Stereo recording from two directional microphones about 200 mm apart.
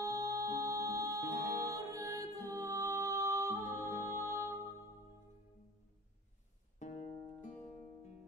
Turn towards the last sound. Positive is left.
turn(degrees=35)  # may be behind; listen again after turning